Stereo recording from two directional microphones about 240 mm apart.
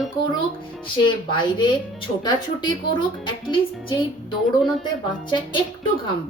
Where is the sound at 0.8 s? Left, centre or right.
Centre.